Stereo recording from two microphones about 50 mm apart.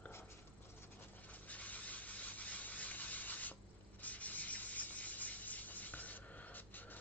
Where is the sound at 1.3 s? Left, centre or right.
Left.